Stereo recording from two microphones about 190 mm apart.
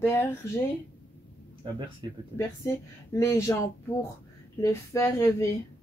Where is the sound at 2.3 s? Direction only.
15° left (ahead or behind).